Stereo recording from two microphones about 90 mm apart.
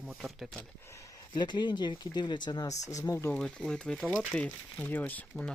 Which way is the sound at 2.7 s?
40° left (ahead or behind).